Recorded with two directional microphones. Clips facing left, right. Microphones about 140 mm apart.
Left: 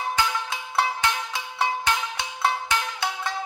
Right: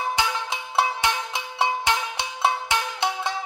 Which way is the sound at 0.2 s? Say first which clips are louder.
Even; 15° right (ahead or behind).